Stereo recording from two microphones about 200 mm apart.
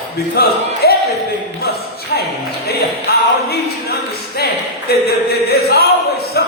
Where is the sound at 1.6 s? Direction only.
50° left (ahead or behind).